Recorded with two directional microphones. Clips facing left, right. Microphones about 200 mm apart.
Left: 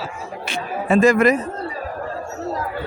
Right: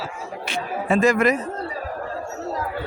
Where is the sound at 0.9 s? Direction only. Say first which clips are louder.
Left 4 dB; 35° left (ahead or behind).